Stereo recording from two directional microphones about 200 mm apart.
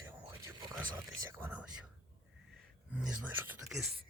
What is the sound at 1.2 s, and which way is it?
Speech, 10° right (ahead or behind).